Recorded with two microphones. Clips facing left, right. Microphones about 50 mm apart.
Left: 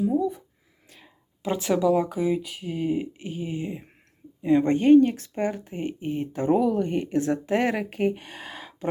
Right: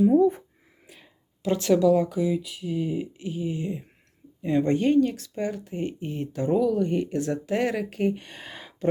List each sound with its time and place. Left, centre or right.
0.0 s a sound: right
0.9 s whispering: centre
1.4 s a woman's voice: centre
2.1 s speech: left
8.3 s speech: centre